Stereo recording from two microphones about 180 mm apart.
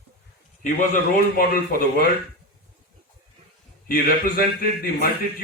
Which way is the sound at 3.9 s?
55° left (ahead or behind).